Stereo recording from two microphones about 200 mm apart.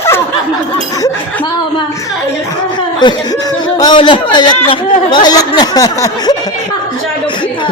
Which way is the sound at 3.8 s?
20° left (ahead or behind).